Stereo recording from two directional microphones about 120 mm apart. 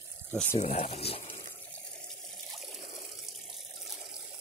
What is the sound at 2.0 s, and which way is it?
Water, centre (ahead or behind).